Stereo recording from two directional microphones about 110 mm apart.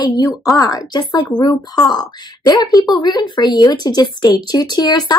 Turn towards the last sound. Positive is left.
turn(degrees=40)  # may be behind; listen again after turning